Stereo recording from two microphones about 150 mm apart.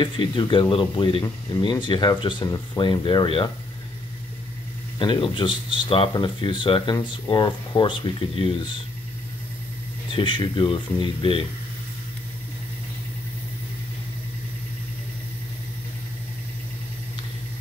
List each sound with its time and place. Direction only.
0.0 s speech: 30° left (ahead or behind)
4.9 s speech: 35° left (ahead or behind)
10.1 s speech: 35° left (ahead or behind)